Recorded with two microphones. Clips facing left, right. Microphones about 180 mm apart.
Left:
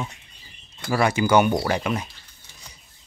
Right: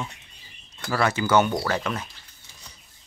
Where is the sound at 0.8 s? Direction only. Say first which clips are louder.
Left 3 dB; 15° left (ahead or behind).